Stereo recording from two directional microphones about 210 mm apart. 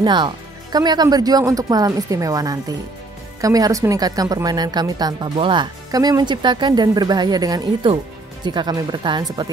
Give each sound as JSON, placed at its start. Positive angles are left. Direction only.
{"t": 0.0, "sound": "speech", "side_deg": -20}